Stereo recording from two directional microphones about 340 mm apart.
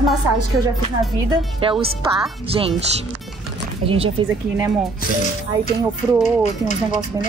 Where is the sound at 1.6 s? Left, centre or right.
Centre.